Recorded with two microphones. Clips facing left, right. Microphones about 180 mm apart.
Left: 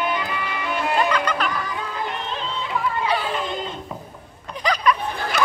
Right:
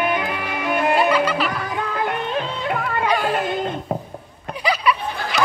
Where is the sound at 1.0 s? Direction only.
5° right (ahead or behind).